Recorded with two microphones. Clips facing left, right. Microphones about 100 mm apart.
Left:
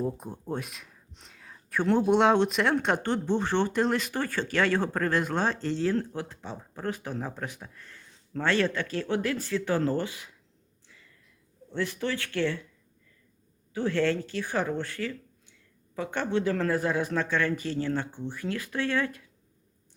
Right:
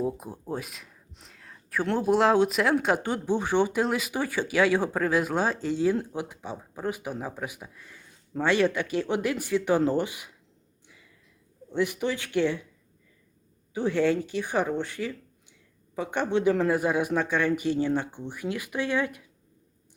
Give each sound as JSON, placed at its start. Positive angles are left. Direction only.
{"t": 0.0, "sound": "speech", "side_deg": -5}
{"t": 10.8, "sound": "a sound", "side_deg": -15}
{"t": 11.7, "sound": "speech", "side_deg": -15}
{"t": 13.7, "sound": "speech", "side_deg": -15}